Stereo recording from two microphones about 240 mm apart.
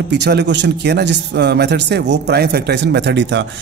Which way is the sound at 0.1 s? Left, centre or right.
Right.